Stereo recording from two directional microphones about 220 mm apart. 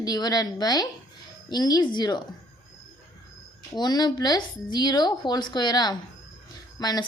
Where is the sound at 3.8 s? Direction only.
20° left (ahead or behind).